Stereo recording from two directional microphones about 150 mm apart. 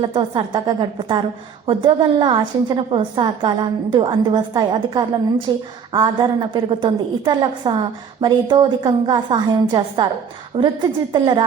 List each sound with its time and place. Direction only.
0.0 s a woman's voice: 35° right (ahead or behind)